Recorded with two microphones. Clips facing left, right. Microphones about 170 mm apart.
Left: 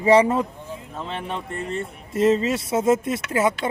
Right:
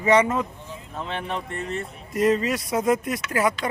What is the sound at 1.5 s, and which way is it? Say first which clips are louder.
Speech: left 2 dB; 30° left (ahead or behind).